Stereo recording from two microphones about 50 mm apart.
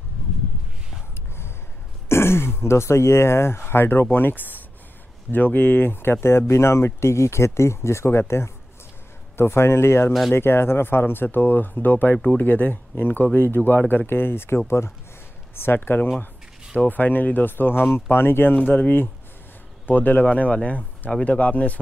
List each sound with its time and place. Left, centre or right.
2.0 s speech: left
6.2 s speech: left
16.7 s speech: left
18.7 s speech: left